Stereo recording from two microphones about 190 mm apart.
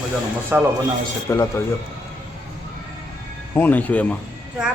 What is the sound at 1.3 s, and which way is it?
Speech, 15° left (ahead or behind).